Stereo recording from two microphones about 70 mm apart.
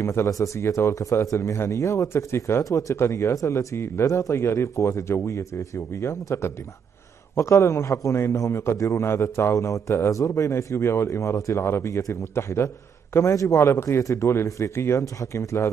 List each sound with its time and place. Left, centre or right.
0.0 s a man's voice: left